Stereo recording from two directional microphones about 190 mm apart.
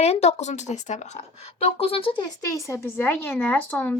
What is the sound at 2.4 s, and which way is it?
Speech, 15° left (ahead or behind).